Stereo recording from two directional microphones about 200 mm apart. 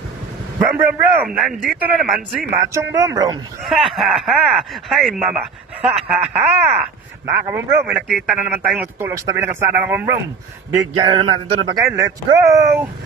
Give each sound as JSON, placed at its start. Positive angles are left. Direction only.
{"t": 0.6, "sound": "speech", "side_deg": -10}
{"t": 2.6, "sound": "speech", "side_deg": -15}
{"t": 3.6, "sound": "speech", "side_deg": 0}
{"t": 8.1, "sound": "speech", "side_deg": 0}
{"t": 11.0, "sound": "speech", "side_deg": -25}